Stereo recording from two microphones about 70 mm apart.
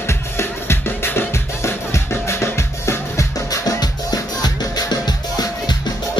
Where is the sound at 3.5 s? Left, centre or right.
Left.